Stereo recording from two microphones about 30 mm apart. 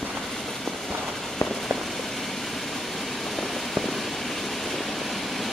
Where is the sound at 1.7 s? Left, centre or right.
Centre.